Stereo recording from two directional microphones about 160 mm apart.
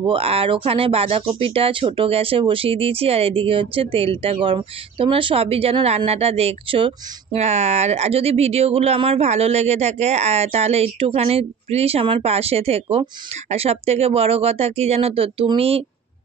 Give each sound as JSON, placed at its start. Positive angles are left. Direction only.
{"t": 0.0, "sound": "speech", "side_deg": -35}